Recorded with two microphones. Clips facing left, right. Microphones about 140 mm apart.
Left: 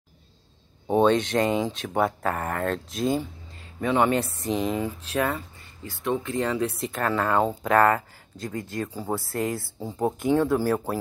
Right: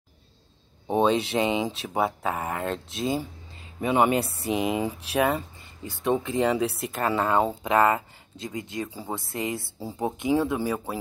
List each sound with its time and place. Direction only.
0.8 s speech: centre (ahead or behind)
3.8 s speech: 10° right (ahead or behind)
6.8 s speech: 5° right (ahead or behind)